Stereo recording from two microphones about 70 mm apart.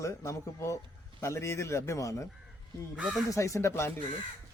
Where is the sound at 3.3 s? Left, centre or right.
Left.